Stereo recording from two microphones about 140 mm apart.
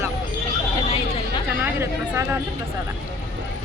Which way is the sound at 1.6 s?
15° right (ahead or behind).